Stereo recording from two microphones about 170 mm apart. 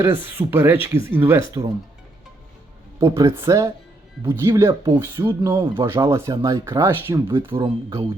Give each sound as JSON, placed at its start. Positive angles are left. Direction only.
{"t": 0.0, "sound": "speech", "side_deg": -15}
{"t": 3.0, "sound": "speech", "side_deg": -15}
{"t": 4.7, "sound": "speech", "side_deg": -25}
{"t": 5.8, "sound": "speech", "side_deg": -15}